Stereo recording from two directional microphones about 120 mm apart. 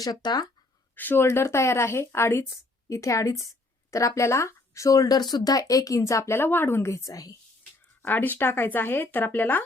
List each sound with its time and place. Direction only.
0.0 s speech: 35° left (ahead or behind)
0.9 s speech: 15° left (ahead or behind)
8.0 s speech: 15° left (ahead or behind)